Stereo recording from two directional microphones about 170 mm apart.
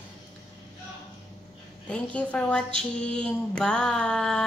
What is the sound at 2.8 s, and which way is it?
Mantra, 5° left (ahead or behind).